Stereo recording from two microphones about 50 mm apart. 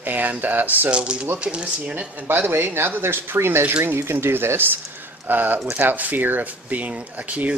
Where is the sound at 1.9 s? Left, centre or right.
Right.